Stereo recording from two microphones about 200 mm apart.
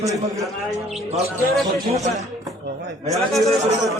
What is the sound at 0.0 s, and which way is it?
Speech, 15° right (ahead or behind).